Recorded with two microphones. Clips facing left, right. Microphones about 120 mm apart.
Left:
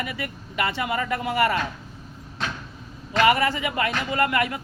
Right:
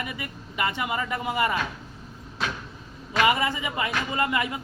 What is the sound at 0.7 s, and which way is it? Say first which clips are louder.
Speech: left 3 dB; 20° right (ahead or behind).